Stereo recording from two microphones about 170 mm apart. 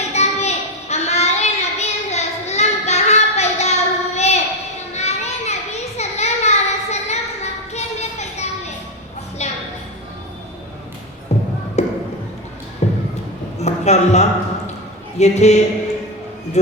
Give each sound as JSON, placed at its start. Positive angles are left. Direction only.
{"t": 0.1, "sound": "child singing", "side_deg": 40}
{"t": 4.9, "sound": "children playing", "side_deg": 40}
{"t": 9.4, "sound": "music", "side_deg": 40}
{"t": 11.3, "sound": "music", "side_deg": 40}
{"t": 11.8, "sound": "a sound", "side_deg": 40}
{"t": 15.2, "sound": "speech", "side_deg": 40}